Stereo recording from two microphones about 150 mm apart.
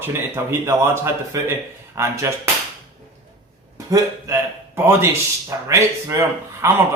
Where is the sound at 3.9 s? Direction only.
20° right (ahead or behind).